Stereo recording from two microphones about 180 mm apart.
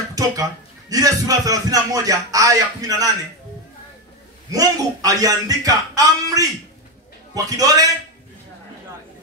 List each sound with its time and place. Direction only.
0.1 s a man's voice: 20° right (ahead or behind)
4.5 s a man's voice: 20° right (ahead or behind)